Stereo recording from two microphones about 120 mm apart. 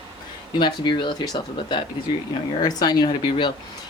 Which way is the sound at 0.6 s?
40° left (ahead or behind).